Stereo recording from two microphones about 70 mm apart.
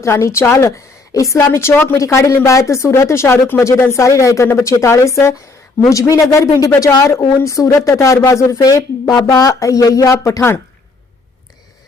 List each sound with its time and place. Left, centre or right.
0.0 s speech: left
1.7 s speech: left
2.0 s speech: left
8.6 s speech: left